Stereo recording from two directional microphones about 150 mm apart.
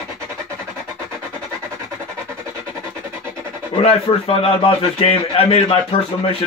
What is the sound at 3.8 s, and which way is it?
A man's voice, 40° left (ahead or behind).